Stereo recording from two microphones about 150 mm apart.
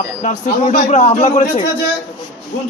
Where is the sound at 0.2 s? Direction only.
55° left (ahead or behind).